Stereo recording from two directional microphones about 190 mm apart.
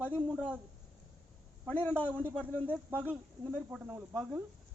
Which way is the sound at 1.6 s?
10° left (ahead or behind).